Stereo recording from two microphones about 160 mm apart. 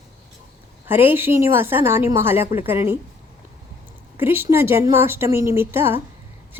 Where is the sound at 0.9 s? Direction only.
15° right (ahead or behind).